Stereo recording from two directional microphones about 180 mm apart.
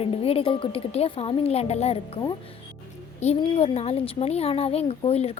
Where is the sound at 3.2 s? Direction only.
35° left (ahead or behind).